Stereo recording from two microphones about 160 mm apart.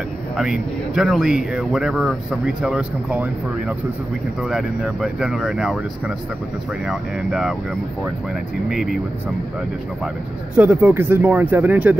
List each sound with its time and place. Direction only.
0.4 s speech: centre (ahead or behind)
8.6 s speech: 5° right (ahead or behind)
10.5 s speech: 10° right (ahead or behind)